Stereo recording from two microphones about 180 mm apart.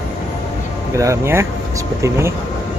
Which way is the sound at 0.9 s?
15° right (ahead or behind).